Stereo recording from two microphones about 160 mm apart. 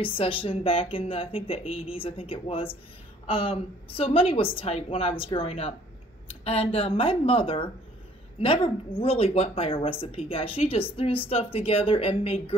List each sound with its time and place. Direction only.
0.0 s speech: 35° left (ahead or behind)